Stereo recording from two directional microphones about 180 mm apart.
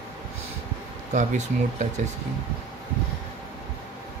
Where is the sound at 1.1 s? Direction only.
40° right (ahead or behind).